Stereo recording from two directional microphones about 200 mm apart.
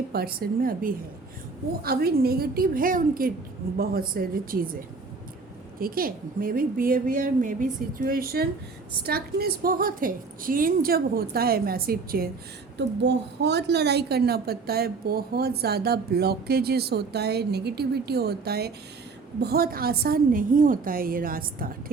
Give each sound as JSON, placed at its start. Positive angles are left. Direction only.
{"t": 0.1, "sound": "a woman's voice", "side_deg": -50}
{"t": 5.8, "sound": "a woman's voice", "side_deg": -45}
{"t": 12.7, "sound": "a woman's voice", "side_deg": -60}